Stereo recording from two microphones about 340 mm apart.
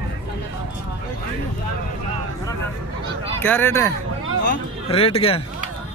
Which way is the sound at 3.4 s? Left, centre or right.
Centre.